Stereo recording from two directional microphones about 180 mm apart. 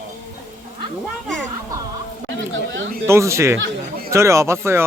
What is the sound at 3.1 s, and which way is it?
Speech, 15° right (ahead or behind).